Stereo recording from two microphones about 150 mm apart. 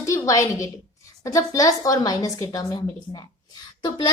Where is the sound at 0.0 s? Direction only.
20° left (ahead or behind).